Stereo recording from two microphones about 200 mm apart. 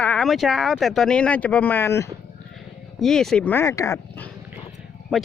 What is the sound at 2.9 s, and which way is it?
Speech, centre (ahead or behind).